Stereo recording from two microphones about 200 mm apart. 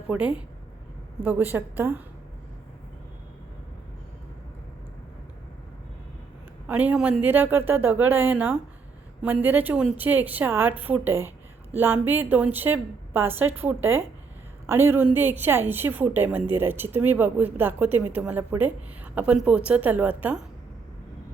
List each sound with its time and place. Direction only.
0.1 s a woman's voice: 5° right (ahead or behind)
6.7 s a woman's voice: 10° right (ahead or behind)